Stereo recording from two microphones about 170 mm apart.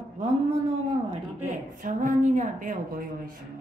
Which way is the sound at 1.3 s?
45° right (ahead or behind).